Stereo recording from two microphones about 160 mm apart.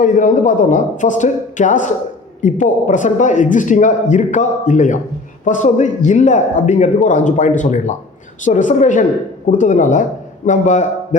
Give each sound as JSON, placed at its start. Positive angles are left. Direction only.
{"t": 0.0, "sound": "a man's voice", "side_deg": 55}